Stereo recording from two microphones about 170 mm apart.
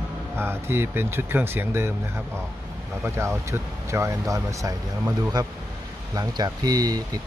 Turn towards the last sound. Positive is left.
turn(degrees=-20)  # may be behind; listen again after turning